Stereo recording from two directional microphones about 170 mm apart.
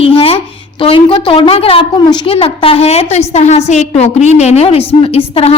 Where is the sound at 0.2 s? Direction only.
35° left (ahead or behind).